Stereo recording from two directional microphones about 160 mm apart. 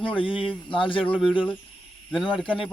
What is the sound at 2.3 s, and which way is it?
Speech, 30° left (ahead or behind).